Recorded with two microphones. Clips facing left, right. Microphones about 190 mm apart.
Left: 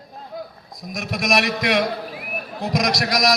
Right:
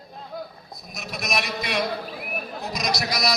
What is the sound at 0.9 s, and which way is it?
A man's voice, 90° left.